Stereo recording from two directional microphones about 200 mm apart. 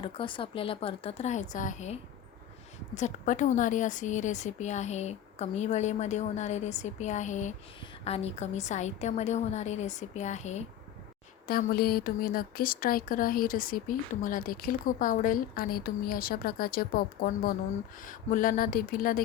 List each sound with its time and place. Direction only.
0.0 s a woman's voice: 25° left (ahead or behind)
11.4 s speech: 50° left (ahead or behind)